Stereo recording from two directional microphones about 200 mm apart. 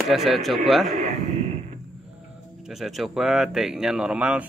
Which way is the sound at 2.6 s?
Centre (ahead or behind).